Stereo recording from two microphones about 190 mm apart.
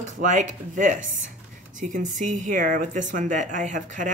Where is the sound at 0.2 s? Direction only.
40° right (ahead or behind).